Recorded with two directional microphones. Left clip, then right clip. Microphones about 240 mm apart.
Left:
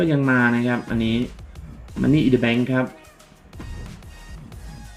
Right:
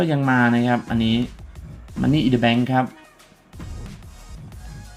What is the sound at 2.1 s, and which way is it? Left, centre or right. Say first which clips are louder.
Speech: even; right.